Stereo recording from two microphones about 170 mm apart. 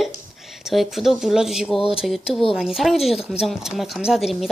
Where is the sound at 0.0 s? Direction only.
Centre (ahead or behind).